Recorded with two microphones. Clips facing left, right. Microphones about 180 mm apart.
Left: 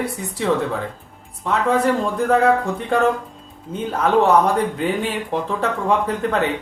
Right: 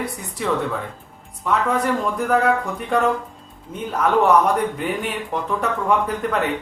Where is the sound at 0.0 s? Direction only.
30° left (ahead or behind).